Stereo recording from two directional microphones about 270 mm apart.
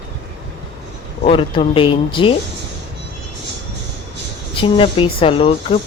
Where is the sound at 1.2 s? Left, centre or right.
Centre.